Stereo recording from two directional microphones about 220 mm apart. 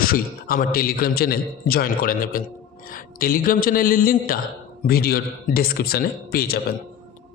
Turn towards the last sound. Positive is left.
turn(degrees=45)  # may be behind; listen again after turning